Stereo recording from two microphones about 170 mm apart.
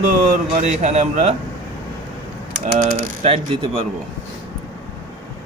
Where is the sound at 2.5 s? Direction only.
45° right (ahead or behind).